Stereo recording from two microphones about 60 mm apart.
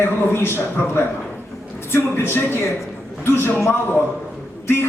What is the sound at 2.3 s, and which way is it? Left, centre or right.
A man's voice, left.